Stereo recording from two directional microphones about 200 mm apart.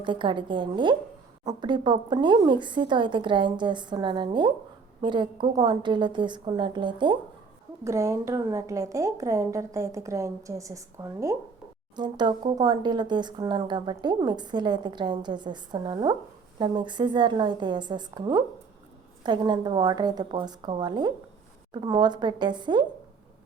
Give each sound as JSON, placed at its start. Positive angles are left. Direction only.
{"t": 0.0, "sound": "a woman's voice", "side_deg": -25}